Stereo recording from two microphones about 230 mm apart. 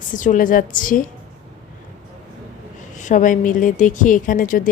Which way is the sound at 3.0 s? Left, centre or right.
Left.